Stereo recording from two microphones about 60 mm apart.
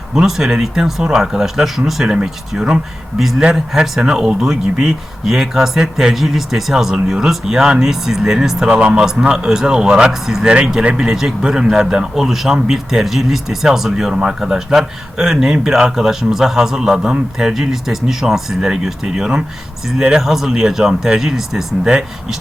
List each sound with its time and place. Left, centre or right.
0.1 s a man's voice: centre